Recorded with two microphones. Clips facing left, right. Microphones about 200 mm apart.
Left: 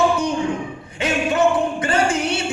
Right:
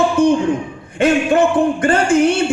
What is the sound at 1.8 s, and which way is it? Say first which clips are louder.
Speech: right 4 dB; 50° right (ahead or behind).